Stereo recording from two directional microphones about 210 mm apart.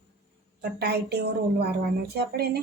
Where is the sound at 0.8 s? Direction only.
50° right (ahead or behind).